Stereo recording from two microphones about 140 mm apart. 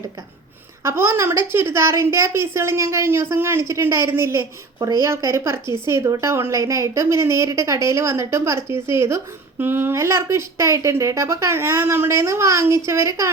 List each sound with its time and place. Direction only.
0.9 s a woman's voice: 20° right (ahead or behind)